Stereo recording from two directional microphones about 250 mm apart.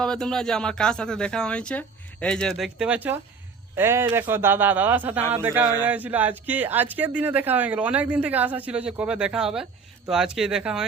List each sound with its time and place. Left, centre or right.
0.0 s speech: centre